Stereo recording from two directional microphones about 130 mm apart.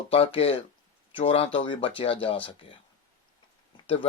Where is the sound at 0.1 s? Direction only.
50° left (ahead or behind).